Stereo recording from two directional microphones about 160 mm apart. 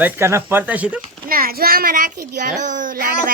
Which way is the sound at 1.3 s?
65° right (ahead or behind).